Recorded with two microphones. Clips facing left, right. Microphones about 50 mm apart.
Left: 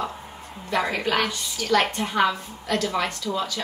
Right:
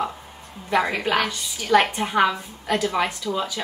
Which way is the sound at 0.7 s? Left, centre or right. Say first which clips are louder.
Right 2 dB; centre.